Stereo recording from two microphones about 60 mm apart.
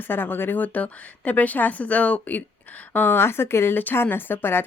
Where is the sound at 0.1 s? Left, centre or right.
Left.